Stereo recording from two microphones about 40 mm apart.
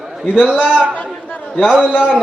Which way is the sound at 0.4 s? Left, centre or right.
Right.